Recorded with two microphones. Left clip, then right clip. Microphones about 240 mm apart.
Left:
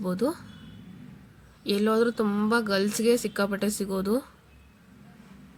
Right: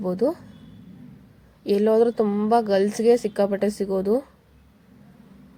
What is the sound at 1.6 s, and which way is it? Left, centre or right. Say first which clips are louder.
A woman's voice: right 6 dB; centre.